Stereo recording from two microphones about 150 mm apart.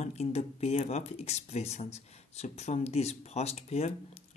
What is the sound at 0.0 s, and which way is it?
Speech, 45° left (ahead or behind).